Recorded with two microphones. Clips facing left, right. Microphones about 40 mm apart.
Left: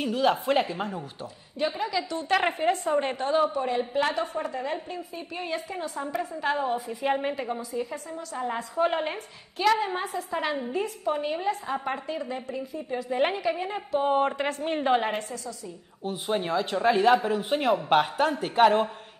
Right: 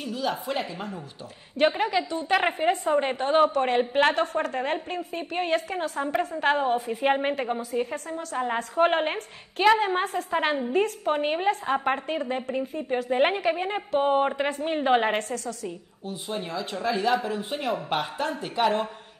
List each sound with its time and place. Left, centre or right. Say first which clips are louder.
0.0 s speech: left 5 dB; left
1.6 s a woman's voice: right 6 dB; right
2.0 s a woman's voice: right 1 dB; right
3.3 s a woman's voice: right 4 dB; right
3.5 s a woman's voice: right 4 dB; right
6.1 s a woman's voice: right 4 dB; right
14.1 s speech: right 1 dB; centre
15.1 s a woman's voice: right 4 dB; right
16.0 s speech: left 5 dB; left